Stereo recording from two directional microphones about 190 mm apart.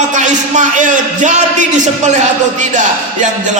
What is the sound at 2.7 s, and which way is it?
Speech, 40° right (ahead or behind).